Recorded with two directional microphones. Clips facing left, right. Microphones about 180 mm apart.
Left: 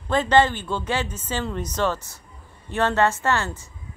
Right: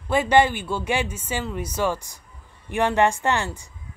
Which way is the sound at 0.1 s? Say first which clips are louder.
Even; 10° right (ahead or behind).